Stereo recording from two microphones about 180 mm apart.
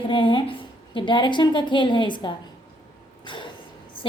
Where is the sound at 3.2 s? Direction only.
25° left (ahead or behind).